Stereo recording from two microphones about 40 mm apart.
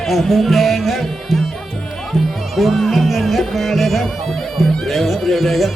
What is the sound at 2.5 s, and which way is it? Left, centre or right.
Music, centre.